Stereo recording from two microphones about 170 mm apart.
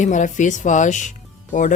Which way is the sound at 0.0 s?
45° left (ahead or behind).